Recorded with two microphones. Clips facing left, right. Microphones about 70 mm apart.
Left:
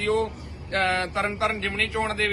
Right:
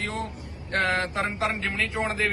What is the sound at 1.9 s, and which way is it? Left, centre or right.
Speech, right.